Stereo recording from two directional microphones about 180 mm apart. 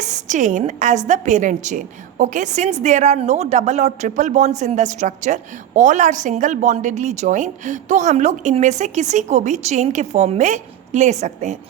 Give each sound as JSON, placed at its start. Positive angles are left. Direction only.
{"t": 0.0, "sound": "a woman's voice", "side_deg": -40}